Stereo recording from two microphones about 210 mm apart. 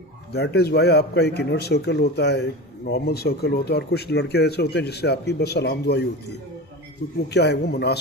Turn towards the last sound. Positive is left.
turn(degrees=50)  # may be behind; listen again after turning